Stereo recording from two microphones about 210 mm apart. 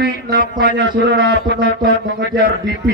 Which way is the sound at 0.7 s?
55° right (ahead or behind).